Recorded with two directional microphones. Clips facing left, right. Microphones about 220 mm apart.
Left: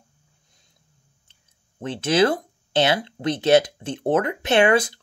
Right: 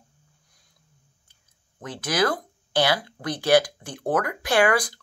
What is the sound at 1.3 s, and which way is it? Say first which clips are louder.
Speech: left 2 dB; 25° left (ahead or behind).